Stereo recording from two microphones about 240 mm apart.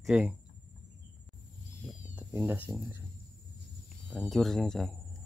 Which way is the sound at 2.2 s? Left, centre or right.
Centre.